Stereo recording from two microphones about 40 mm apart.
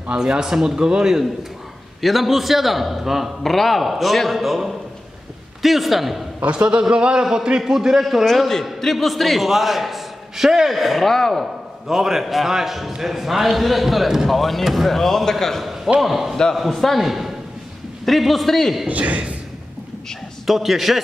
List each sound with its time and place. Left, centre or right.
0.2 s a man's voice: centre
2.0 s speech: centre
6.8 s a man's voice: right; by 8.3 s centre
8.3 s a man's voice: centre
11.9 s speech: centre
16.0 s a man's voice: centre
18.9 s speech: right
20.4 s speech: centre